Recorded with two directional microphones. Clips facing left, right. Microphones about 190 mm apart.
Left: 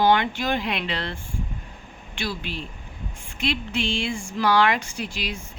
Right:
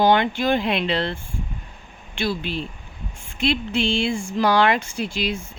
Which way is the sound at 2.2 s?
30° right (ahead or behind).